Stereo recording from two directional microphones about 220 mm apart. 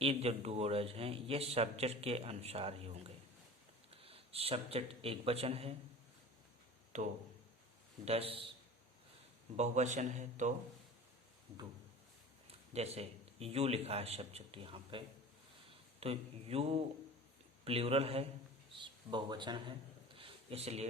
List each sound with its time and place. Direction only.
0.0 s speech: 25° right (ahead or behind)
6.9 s a man's voice: 35° right (ahead or behind)
9.6 s a man's voice: 35° right (ahead or behind)
12.5 s a man's voice: 30° right (ahead or behind)
20.1 s a sound: 25° right (ahead or behind)